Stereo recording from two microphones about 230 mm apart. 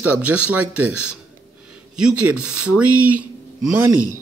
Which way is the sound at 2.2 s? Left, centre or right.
Right.